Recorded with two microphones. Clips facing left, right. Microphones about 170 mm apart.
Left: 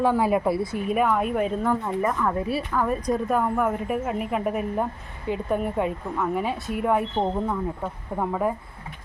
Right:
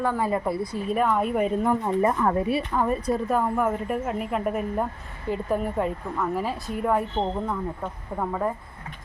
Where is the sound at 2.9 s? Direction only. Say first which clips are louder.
Even; 5° right (ahead or behind).